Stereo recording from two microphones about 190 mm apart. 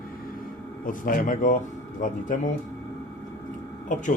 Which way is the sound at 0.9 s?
45° left (ahead or behind).